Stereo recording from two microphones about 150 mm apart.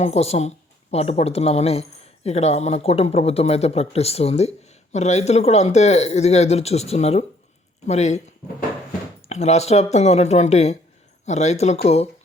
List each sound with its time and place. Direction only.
0.0 s speech: 45° left (ahead or behind)
9.3 s speech: 45° left (ahead or behind)